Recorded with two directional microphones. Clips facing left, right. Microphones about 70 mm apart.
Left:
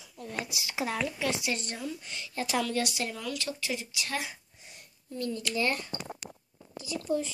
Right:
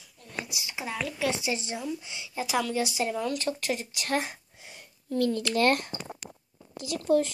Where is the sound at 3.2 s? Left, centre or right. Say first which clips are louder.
Right 5 dB; right.